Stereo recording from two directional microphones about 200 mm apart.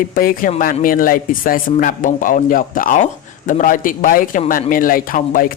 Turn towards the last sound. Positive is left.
turn(degrees=45)  # may be behind; listen again after turning